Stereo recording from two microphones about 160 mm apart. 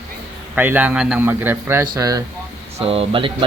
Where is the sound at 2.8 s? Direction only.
40° right (ahead or behind).